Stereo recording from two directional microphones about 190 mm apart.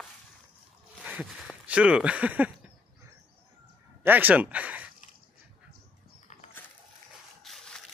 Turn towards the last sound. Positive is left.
turn(degrees=0)  # may be behind; listen again after turning